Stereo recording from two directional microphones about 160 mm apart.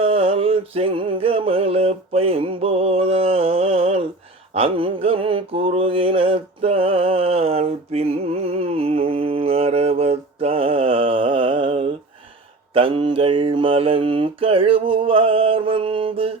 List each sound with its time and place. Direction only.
0.0 s music: 35° right (ahead or behind)
4.5 s mantra: 35° right (ahead or behind)